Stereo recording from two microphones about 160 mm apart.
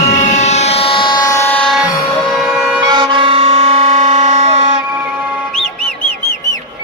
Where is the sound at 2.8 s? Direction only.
30° right (ahead or behind).